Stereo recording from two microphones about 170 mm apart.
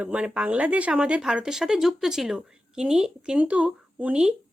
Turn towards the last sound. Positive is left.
turn(degrees=-5)  # may be behind; listen again after turning